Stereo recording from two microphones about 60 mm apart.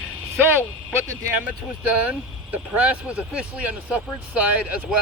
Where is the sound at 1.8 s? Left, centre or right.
Right.